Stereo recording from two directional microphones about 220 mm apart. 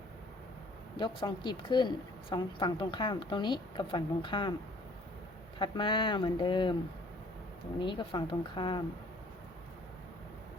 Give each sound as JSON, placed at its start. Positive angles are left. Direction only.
{"t": 0.9, "sound": "a woman's voice", "side_deg": 20}
{"t": 5.5, "sound": "a woman's voice", "side_deg": 20}
{"t": 7.8, "sound": "a woman's voice", "side_deg": 20}